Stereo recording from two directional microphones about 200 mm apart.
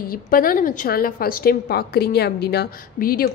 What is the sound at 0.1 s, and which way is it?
A woman's voice, 45° left (ahead or behind).